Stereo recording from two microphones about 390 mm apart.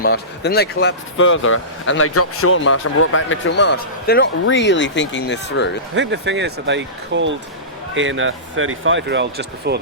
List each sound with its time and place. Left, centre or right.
0.0 s speech: left
5.9 s speech: right